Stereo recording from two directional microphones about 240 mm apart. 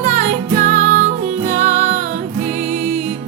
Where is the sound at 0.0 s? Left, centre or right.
Right.